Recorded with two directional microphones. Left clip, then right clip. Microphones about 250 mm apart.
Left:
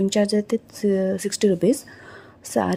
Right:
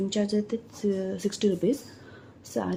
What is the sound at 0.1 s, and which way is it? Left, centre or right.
A woman's voice, left.